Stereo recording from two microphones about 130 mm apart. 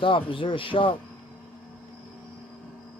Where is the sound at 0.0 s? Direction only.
40° left (ahead or behind).